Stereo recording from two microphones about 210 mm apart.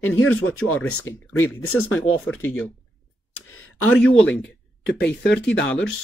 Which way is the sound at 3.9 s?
5° left (ahead or behind).